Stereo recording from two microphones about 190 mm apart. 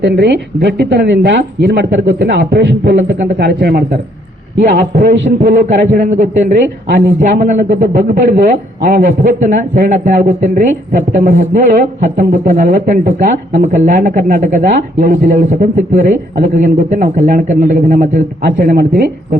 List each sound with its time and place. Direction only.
0.0 s speech: 65° right (ahead or behind)
5.4 s a man's voice: 45° right (ahead or behind)